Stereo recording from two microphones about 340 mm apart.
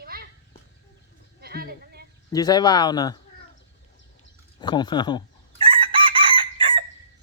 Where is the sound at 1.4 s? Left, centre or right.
Right.